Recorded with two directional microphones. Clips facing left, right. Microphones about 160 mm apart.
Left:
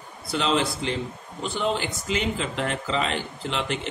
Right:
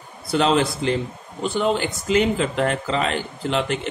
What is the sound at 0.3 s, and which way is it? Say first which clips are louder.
A man's voice: right 5 dB; 50° right (ahead or behind).